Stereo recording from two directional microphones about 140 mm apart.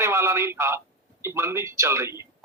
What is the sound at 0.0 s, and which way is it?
A man's voice, 20° right (ahead or behind).